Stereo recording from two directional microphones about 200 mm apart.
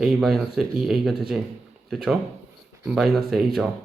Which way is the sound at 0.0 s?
Centre (ahead or behind).